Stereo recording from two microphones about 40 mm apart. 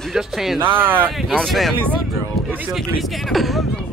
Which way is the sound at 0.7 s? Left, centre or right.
Right.